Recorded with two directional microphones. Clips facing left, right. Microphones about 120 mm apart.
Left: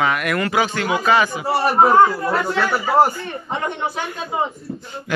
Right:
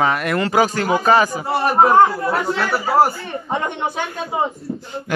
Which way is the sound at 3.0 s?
15° right (ahead or behind).